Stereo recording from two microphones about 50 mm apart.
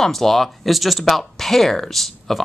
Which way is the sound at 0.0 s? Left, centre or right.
Centre.